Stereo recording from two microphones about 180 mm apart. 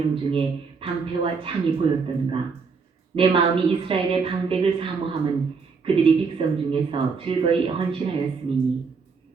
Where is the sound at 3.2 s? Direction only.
30° right (ahead or behind).